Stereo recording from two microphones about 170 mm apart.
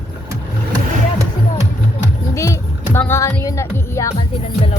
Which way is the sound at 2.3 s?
15° left (ahead or behind).